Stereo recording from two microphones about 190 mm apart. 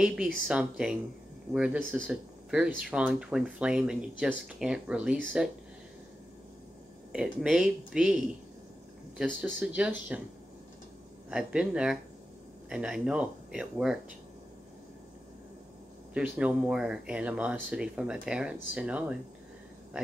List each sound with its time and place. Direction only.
0.0 s speech: 5° right (ahead or behind)
7.1 s speech: 5° right (ahead or behind)
11.2 s speech: 5° right (ahead or behind)
16.1 s speech: 5° right (ahead or behind)